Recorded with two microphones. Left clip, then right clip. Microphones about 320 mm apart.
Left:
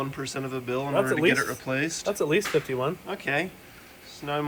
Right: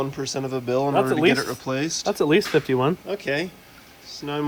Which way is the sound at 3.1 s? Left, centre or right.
Centre.